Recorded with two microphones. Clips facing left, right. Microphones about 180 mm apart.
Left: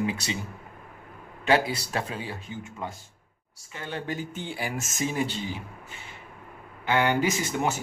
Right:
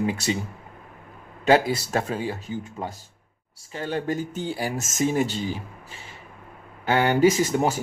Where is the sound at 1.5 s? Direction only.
45° right (ahead or behind).